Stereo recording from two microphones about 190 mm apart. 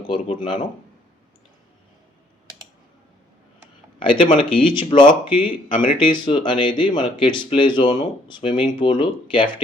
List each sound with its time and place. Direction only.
0.0 s speech: 25° left (ahead or behind)
4.0 s speech: 30° left (ahead or behind)
5.5 s speech: 45° left (ahead or behind)
6.2 s speech: 25° left (ahead or behind)